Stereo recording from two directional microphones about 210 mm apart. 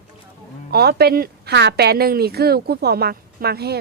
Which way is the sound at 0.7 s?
50° right (ahead or behind).